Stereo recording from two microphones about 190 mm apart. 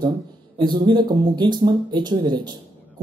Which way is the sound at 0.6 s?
25° right (ahead or behind).